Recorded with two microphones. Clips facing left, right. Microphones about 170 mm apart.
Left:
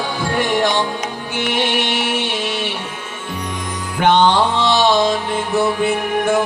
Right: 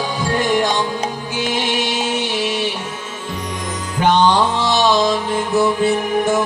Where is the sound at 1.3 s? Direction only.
60° left (ahead or behind).